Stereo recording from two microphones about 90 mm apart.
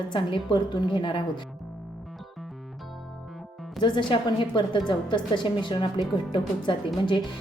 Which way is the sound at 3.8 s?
60° left (ahead or behind).